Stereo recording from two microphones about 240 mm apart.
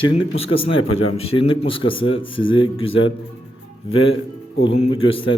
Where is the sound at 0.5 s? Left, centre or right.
Left.